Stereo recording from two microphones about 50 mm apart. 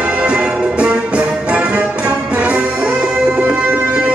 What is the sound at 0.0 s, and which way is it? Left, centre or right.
Music, right.